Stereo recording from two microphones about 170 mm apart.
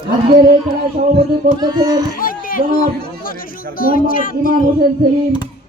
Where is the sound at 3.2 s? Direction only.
55° left (ahead or behind).